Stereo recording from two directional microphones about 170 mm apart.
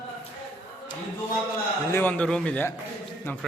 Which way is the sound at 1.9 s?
10° left (ahead or behind).